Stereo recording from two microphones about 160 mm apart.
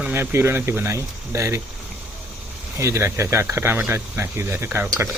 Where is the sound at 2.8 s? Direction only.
15° right (ahead or behind).